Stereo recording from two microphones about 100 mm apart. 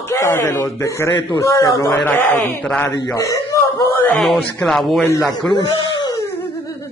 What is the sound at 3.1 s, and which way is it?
Speech, 35° left (ahead or behind).